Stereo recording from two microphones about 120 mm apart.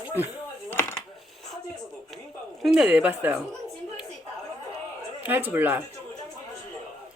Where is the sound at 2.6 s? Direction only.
5° right (ahead or behind).